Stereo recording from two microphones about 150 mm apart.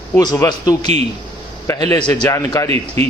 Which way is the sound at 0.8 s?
45° right (ahead or behind).